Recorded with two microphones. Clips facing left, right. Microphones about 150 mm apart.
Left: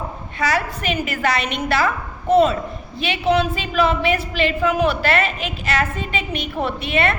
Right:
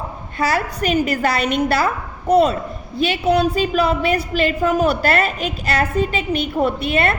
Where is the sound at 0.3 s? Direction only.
40° right (ahead or behind).